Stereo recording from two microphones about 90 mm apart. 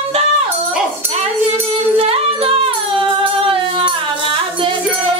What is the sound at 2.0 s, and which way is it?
Music, 90° right.